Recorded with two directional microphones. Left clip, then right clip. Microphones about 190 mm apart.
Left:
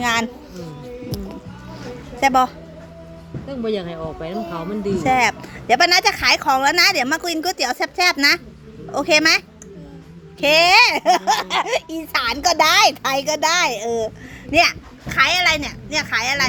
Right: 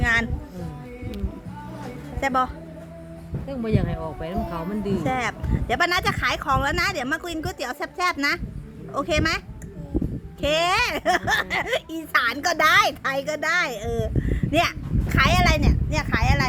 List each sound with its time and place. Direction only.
0.0 s music: 20° left (ahead or behind)
2.2 s speech: 20° left (ahead or behind)
3.5 s speech: 5° left (ahead or behind)
5.0 s speech: 20° left (ahead or behind)
10.4 s a child's voice: 15° left (ahead or behind)